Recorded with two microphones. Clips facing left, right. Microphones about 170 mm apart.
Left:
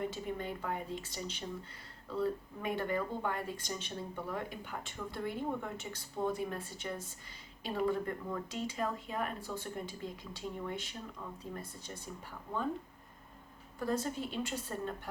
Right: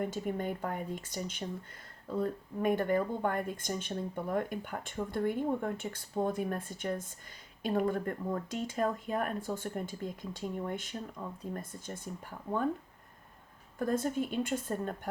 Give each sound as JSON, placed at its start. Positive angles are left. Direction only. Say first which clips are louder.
{"t": 0.0, "sound": "speech", "louder": "right 4 dB", "side_deg": -50}
{"t": 13.7, "sound": "speech", "louder": "right 4 dB", "side_deg": -50}